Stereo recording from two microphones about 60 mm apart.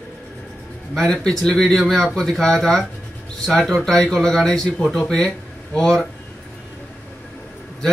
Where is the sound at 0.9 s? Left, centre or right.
Centre.